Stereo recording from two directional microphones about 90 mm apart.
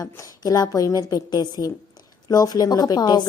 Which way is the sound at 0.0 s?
40° left (ahead or behind).